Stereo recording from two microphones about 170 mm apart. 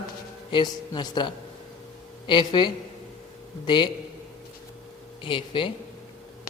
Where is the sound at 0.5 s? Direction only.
25° left (ahead or behind).